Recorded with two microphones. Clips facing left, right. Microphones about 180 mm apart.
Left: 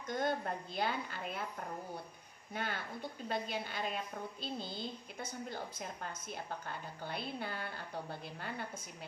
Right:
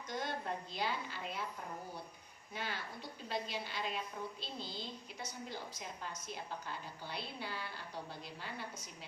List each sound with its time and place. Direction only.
0.1 s a woman's voice: 50° left (ahead or behind)
2.5 s a woman's voice: 55° left (ahead or behind)